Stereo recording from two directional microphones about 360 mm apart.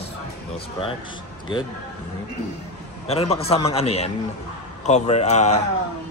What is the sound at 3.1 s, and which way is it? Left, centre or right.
A man's voice, centre.